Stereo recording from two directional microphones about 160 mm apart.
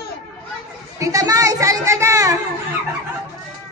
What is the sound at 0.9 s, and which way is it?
A child's voice, 20° right (ahead or behind).